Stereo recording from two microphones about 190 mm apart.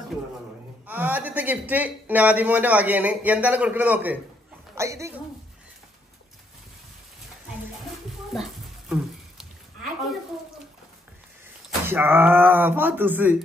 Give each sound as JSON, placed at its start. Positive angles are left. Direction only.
{"t": 0.8, "sound": "a man's voice", "side_deg": -10}
{"t": 8.3, "sound": "a sound", "side_deg": 0}
{"t": 11.8, "sound": "a man's voice", "side_deg": -10}